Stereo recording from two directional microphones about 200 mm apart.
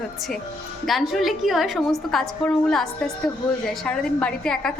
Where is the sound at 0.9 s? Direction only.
Centre (ahead or behind).